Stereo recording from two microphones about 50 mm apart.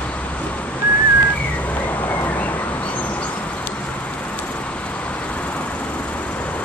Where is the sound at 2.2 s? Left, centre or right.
Left.